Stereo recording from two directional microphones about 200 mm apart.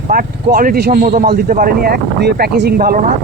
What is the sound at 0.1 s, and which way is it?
Speech, 45° right (ahead or behind).